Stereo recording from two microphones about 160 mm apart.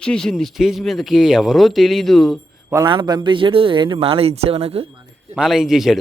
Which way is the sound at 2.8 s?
30° right (ahead or behind).